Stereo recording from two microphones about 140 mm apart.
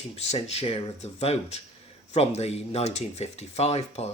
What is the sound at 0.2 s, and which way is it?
A man's voice, 50° left (ahead or behind).